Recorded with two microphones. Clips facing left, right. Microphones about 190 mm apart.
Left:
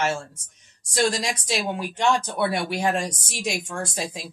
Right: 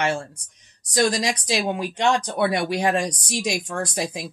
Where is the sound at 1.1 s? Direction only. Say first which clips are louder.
Right 3 dB; 20° right (ahead or behind).